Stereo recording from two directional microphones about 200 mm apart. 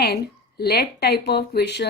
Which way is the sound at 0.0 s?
55° left (ahead or behind).